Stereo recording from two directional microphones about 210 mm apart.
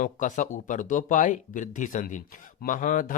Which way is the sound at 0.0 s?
35° left (ahead or behind).